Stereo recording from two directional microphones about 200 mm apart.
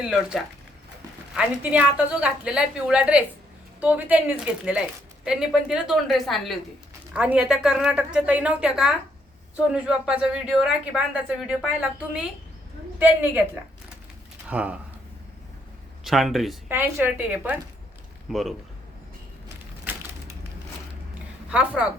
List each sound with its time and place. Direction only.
0.0 s a woman's voice: 5° right (ahead or behind)
14.5 s a woman's voice: 5° right (ahead or behind)
16.0 s a woman's voice: centre (ahead or behind)
19.8 s a sound: 10° right (ahead or behind)
21.5 s a woman's voice: 5° right (ahead or behind)